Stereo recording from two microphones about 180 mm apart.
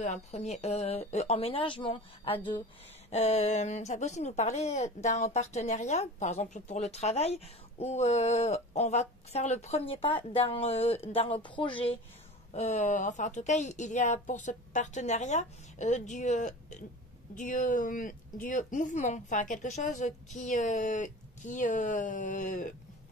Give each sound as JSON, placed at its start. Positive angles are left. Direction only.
{"t": 0.0, "sound": "a woman's voice", "side_deg": 40}
{"t": 12.5, "sound": "a woman's voice", "side_deg": 40}